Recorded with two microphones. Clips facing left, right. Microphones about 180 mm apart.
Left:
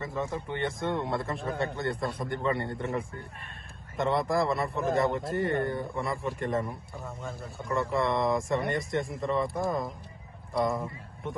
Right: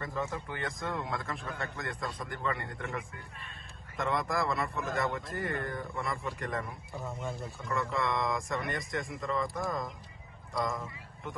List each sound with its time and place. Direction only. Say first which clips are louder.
0.0 s a man's voice: left 3 dB; 20° left (ahead or behind)
6.9 s speech: right 1 dB; centre (ahead or behind)
7.6 s a man's voice: left 5 dB; 35° left (ahead or behind)
8.9 s speech: left 6 dB; centre (ahead or behind)
9.2 s speech: left 4 dB; 30° left (ahead or behind)